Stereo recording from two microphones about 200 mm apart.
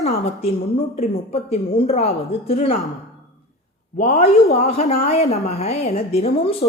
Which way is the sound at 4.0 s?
35° left (ahead or behind).